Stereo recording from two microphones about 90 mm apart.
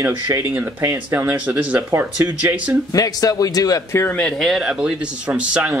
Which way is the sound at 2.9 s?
40° left (ahead or behind).